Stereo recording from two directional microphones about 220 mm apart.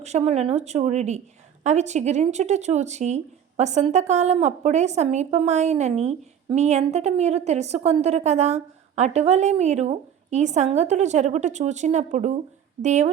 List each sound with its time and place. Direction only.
0.0 s a woman's voice: 30° right (ahead or behind)